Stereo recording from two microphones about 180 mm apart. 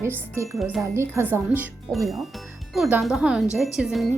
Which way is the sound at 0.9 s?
15° right (ahead or behind).